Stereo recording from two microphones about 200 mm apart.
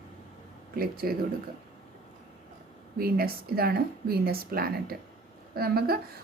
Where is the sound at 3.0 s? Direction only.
50° right (ahead or behind).